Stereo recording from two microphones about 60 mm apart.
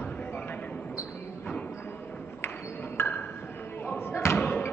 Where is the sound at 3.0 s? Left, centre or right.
Left.